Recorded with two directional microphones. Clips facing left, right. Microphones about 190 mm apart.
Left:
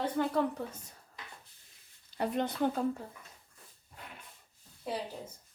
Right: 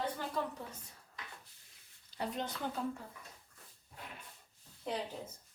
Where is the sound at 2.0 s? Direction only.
55° left (ahead or behind).